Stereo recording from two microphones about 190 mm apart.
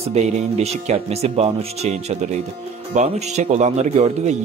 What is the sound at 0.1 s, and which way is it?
Speech, 35° right (ahead or behind).